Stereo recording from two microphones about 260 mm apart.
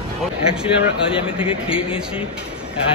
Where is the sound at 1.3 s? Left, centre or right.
Centre.